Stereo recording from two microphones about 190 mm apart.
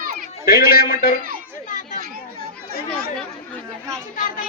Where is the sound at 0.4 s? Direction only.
50° left (ahead or behind).